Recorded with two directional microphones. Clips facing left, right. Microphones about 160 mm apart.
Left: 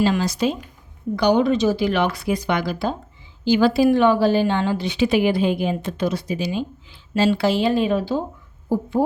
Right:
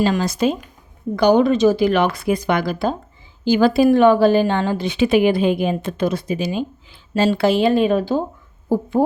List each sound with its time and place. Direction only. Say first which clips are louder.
0.0 s a woman's voice: right 2 dB; 50° right (ahead or behind)